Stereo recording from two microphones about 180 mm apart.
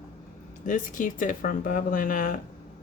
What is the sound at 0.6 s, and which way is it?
Speech, 45° left (ahead or behind).